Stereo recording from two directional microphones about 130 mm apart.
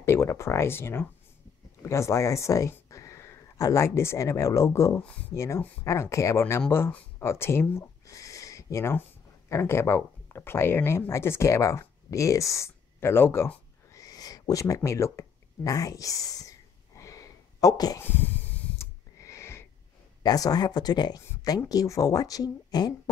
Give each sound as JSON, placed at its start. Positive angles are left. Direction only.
{"t": 0.0, "sound": "speech", "side_deg": 20}
{"t": 18.0, "sound": "snort", "side_deg": 15}
{"t": 19.2, "sound": "a sound", "side_deg": 20}
{"t": 20.2, "sound": "speech", "side_deg": 30}